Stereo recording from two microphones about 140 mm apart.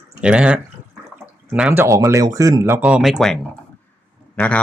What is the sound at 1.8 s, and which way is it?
A man's voice, 20° right (ahead or behind).